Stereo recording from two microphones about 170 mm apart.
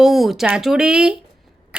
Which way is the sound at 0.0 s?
Centre (ahead or behind).